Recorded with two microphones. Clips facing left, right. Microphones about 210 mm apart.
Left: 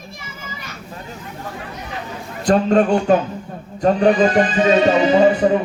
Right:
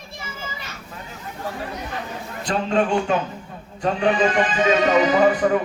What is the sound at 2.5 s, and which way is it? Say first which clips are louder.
A man's voice: left 6 dB; 45° left (ahead or behind).